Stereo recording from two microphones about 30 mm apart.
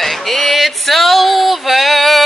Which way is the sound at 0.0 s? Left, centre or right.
Centre.